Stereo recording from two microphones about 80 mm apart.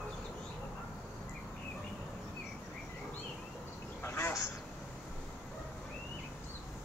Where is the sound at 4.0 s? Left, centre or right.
Left.